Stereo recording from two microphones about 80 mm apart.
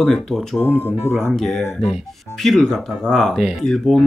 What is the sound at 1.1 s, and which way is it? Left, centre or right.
Speech, centre.